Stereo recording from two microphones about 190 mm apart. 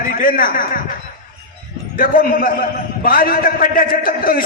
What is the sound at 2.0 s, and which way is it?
A man's voice, 50° left (ahead or behind).